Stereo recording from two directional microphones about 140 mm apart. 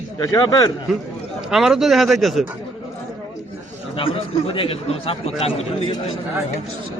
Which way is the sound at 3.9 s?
40° left (ahead or behind).